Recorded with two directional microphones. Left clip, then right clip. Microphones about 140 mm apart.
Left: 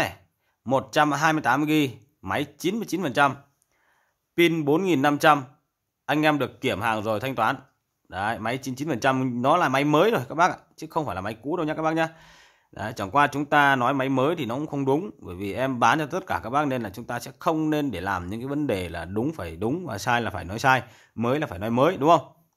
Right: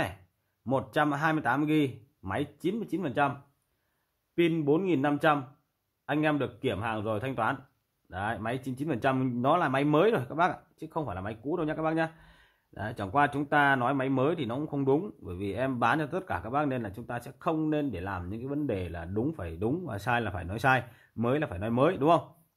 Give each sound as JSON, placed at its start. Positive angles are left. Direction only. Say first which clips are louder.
{"t": 0.7, "sound": "a man's voice", "louder": "left 6 dB", "side_deg": 15}
{"t": 4.4, "sound": "a man's voice", "louder": "left 5 dB", "side_deg": 25}